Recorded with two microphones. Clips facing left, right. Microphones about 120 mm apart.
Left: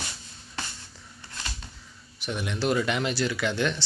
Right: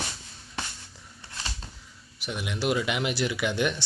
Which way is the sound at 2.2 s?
5° right (ahead or behind).